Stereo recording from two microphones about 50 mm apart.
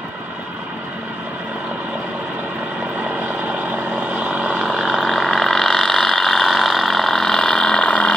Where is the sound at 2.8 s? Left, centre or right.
Right.